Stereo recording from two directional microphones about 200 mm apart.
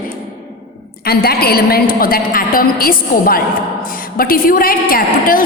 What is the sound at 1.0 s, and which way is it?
A woman's voice, 50° left (ahead or behind).